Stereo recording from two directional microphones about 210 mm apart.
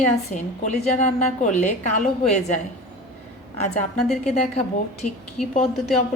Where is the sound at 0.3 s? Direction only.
35° left (ahead or behind).